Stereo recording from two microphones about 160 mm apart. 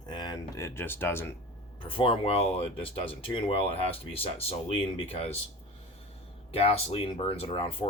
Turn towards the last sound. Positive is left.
turn(degrees=35)  # may be behind; listen again after turning